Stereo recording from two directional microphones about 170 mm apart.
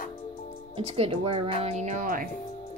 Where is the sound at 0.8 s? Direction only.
35° right (ahead or behind); by 2.3 s 55° right (ahead or behind).